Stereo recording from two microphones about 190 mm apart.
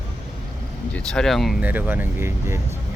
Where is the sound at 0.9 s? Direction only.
5° left (ahead or behind); by 2.6 s 15° right (ahead or behind).